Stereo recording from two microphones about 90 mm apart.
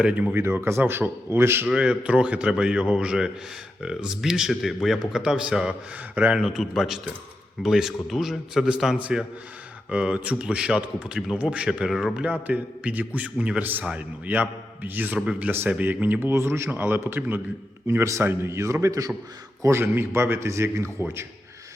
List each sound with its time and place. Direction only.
0.0 s a man's voice: 10° right (ahead or behind)
0.3 s a man's voice: 25° right (ahead or behind)
1.6 s a man's voice: 10° right (ahead or behind)
6.4 s a man's voice: centre (ahead or behind)
12.2 s a man's voice: 15° right (ahead or behind)
16.3 s a man's voice: 30° right (ahead or behind)
19.6 s a man's voice: 25° right (ahead or behind)